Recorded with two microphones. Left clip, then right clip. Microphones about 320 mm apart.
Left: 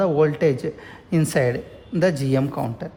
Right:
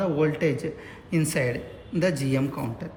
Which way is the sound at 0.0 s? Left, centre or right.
Left.